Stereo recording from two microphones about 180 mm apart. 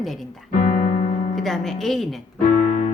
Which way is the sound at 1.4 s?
Centre (ahead or behind).